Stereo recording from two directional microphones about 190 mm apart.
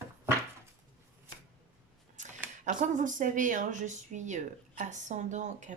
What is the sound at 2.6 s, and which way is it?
Speech, 45° right (ahead or behind).